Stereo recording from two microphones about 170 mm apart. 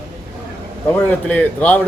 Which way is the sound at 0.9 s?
10° left (ahead or behind).